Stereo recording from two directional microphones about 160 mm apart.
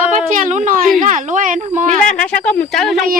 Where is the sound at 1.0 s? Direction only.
55° right (ahead or behind).